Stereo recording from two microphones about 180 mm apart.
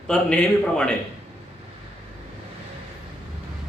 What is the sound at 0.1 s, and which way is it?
Speech, 5° left (ahead or behind).